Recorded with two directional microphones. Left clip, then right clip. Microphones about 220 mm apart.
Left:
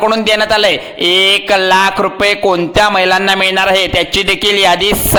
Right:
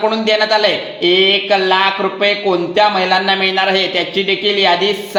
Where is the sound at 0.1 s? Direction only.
40° left (ahead or behind).